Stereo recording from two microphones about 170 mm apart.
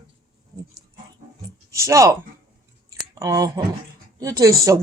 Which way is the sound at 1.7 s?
15° right (ahead or behind).